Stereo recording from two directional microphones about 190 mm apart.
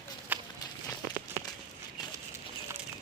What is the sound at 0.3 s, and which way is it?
Walk, 10° right (ahead or behind).